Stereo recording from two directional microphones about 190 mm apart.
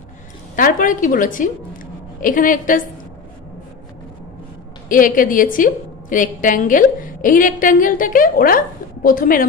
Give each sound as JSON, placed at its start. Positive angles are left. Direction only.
{"t": 0.6, "sound": "a woman's voice", "side_deg": 45}
{"t": 4.8, "sound": "a woman's voice", "side_deg": 45}